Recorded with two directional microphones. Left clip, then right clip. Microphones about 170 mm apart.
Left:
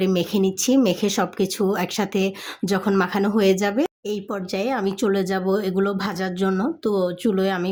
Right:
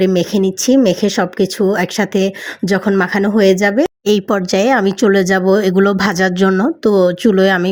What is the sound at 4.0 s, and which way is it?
Speech, 55° right (ahead or behind).